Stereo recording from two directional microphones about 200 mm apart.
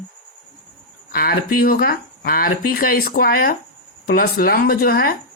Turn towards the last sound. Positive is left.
turn(degrees=50)  # may be behind; listen again after turning